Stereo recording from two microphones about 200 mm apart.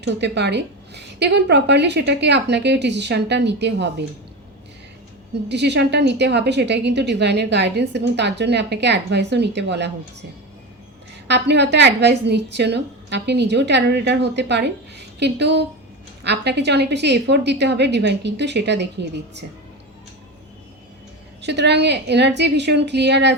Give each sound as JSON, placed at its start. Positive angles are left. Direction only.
{"t": 0.0, "sound": "a woman's voice", "side_deg": -60}
{"t": 5.5, "sound": "a woman's voice", "side_deg": -60}
{"t": 11.3, "sound": "a woman's voice", "side_deg": -60}
{"t": 21.4, "sound": "a woman's voice", "side_deg": -55}